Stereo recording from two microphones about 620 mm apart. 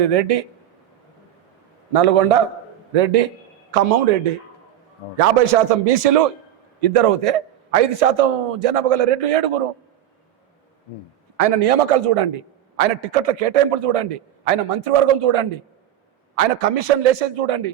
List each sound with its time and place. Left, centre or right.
0.0 s a man's voice: right
1.9 s a man's voice: right
5.1 s a man's voice: right
6.8 s a man's voice: right
11.3 s a man's voice: right
16.3 s a man's voice: right